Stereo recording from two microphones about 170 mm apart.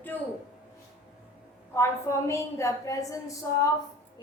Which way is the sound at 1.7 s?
15° left (ahead or behind).